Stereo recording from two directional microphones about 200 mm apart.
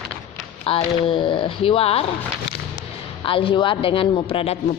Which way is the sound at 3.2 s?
25° left (ahead or behind).